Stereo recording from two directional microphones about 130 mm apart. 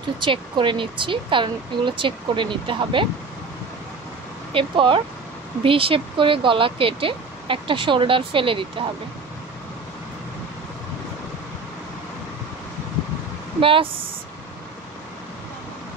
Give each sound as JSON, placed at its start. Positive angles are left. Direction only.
{"t": 0.2, "sound": "speech", "side_deg": -40}
{"t": 4.6, "sound": "speech", "side_deg": -40}
{"t": 13.6, "sound": "speech", "side_deg": -45}